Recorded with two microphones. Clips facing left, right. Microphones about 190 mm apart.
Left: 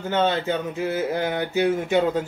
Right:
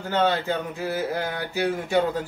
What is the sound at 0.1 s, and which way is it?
Speech, 20° left (ahead or behind).